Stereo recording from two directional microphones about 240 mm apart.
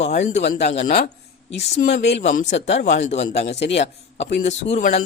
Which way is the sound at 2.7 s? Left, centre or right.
Left.